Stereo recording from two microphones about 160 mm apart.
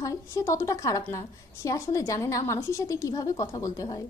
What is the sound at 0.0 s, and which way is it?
A woman's voice, 20° left (ahead or behind).